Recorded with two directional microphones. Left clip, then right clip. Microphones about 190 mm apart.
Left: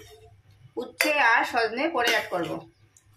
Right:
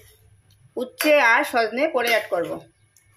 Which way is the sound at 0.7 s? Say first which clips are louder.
Right 7 dB; 40° right (ahead or behind).